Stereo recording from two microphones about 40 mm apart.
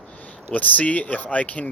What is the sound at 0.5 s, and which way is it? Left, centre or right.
Speech, left.